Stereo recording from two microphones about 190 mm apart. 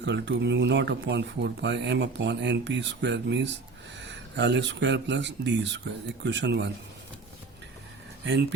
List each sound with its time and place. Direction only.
0.0 s speech: 65° right (ahead or behind)
8.2 s speech: 70° right (ahead or behind)